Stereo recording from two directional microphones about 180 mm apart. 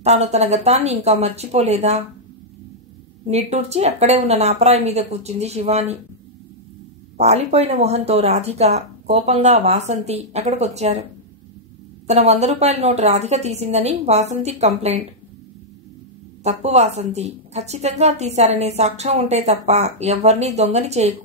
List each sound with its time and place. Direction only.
0.0 s speech: 35° right (ahead or behind)
3.3 s speech: 35° right (ahead or behind)
7.2 s speech: 35° right (ahead or behind)
12.1 s speech: 35° right (ahead or behind)
16.4 s speech: 35° right (ahead or behind)